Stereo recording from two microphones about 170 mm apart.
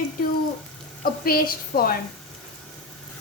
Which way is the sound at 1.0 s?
60° left (ahead or behind).